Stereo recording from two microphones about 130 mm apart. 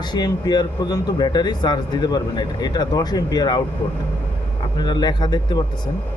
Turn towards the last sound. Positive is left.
turn(degrees=35)  # may be behind; listen again after turning